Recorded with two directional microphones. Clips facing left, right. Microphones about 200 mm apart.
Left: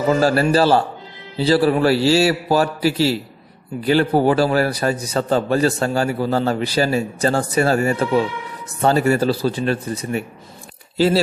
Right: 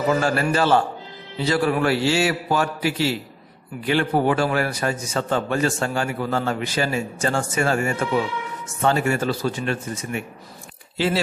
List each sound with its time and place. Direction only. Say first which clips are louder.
0.1 s a man's voice: left 6 dB; 35° left (ahead or behind)